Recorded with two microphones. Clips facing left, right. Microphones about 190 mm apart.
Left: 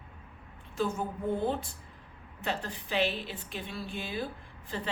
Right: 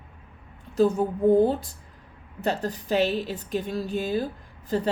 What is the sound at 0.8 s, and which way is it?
A woman's voice, 35° right (ahead or behind).